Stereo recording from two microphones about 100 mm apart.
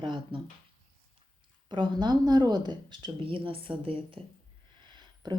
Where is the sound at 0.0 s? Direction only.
55° right (ahead or behind).